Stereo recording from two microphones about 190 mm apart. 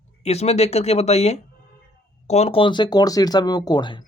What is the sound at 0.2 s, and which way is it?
Speech, 35° left (ahead or behind).